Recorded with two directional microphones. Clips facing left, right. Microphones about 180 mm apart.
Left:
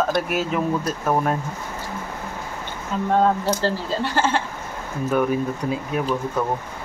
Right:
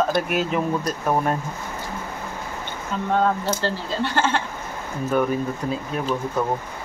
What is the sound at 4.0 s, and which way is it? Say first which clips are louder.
Speech: right 1 dB; 5° left (ahead or behind).